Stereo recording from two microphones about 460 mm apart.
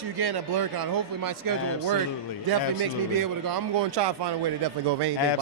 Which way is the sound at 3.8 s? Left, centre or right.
Right.